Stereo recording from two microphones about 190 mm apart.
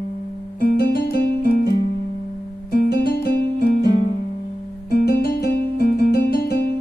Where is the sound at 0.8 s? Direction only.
60° left (ahead or behind).